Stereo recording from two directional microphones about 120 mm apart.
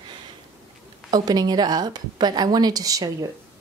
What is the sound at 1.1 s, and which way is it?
A woman's voice, 35° right (ahead or behind).